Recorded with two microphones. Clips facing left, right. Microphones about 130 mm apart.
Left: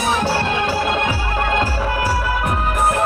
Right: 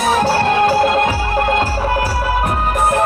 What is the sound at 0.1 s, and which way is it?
Music, 40° right (ahead or behind).